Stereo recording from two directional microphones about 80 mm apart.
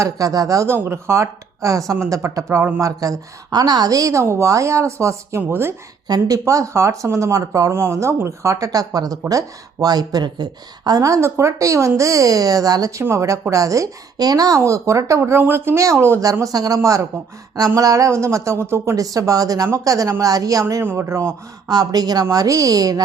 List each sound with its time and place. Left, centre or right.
0.0 s speech: right
0.7 s speech: right
3.5 s speech: right
6.1 s speech: right
18.9 s speech: right
20.8 s speech: right
21.7 s speech: right